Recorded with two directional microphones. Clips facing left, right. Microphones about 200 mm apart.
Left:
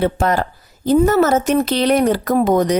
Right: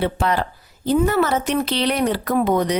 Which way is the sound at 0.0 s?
45° left (ahead or behind).